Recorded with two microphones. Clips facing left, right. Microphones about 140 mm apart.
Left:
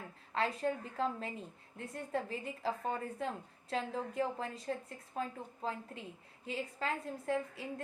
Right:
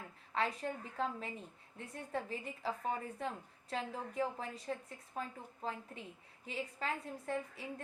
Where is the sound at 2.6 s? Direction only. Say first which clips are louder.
Left 2 dB; 35° left (ahead or behind).